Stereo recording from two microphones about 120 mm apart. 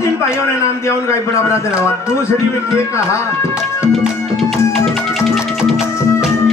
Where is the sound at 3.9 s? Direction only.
Centre (ahead or behind).